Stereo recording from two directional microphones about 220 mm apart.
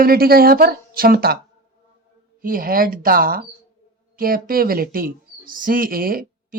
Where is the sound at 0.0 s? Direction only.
45° right (ahead or behind).